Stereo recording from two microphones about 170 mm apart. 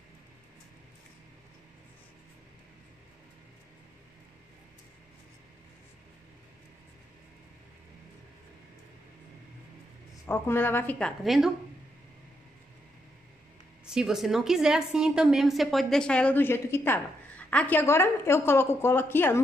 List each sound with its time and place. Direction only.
10.2 s a woman's voice: 10° left (ahead or behind)
13.8 s a woman's voice: 5° right (ahead or behind); by 19.4 s 10° left (ahead or behind)